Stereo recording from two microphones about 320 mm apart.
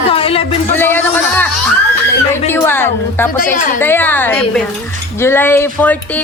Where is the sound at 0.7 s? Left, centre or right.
Centre.